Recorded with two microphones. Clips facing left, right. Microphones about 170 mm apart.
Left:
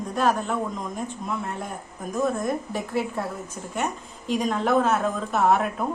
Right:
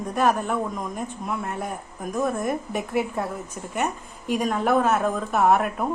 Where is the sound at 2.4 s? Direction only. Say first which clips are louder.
Right 1 dB; 15° right (ahead or behind).